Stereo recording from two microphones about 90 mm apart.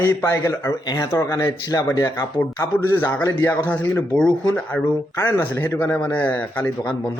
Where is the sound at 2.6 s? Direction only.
25° left (ahead or behind).